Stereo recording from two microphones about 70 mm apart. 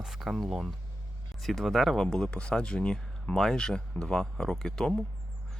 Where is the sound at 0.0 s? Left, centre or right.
Centre.